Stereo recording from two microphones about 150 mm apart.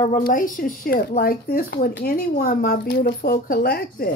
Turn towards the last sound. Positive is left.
turn(degrees=90)